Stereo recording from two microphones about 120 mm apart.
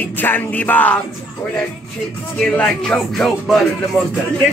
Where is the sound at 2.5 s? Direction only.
10° left (ahead or behind).